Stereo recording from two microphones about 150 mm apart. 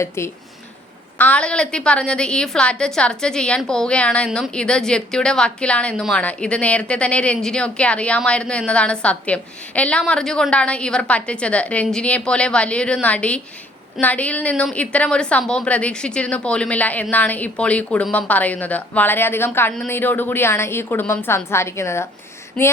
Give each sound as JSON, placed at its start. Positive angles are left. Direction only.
{"t": 0.2, "sound": "a woman's voice", "side_deg": 15}